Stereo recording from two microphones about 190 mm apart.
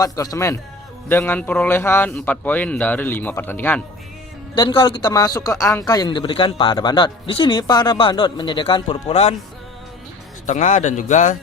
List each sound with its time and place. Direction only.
0.0 s a man's voice: 20° left (ahead or behind)
4.5 s a man's voice: 25° left (ahead or behind)
10.4 s a man's voice: 40° left (ahead or behind)